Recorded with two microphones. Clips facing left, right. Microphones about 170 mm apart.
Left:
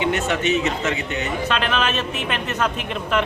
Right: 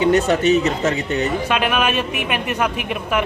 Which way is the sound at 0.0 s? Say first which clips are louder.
Right 6 dB; 35° right (ahead or behind).